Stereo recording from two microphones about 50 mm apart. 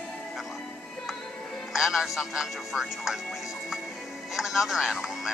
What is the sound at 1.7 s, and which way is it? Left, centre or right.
Speech, centre.